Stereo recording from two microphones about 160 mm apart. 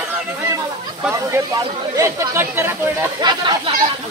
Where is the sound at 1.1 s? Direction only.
15° right (ahead or behind).